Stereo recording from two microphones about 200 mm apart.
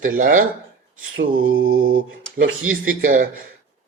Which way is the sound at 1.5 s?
85° right.